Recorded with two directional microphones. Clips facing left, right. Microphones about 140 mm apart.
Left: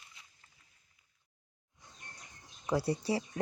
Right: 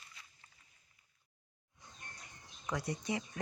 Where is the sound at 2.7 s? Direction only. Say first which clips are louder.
Left 6 dB; 30° left (ahead or behind).